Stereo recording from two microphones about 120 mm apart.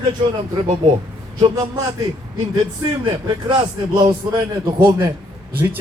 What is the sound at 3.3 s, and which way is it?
A man's voice, 40° right (ahead or behind).